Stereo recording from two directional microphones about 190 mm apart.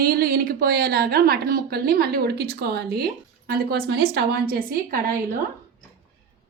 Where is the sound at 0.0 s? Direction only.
50° right (ahead or behind).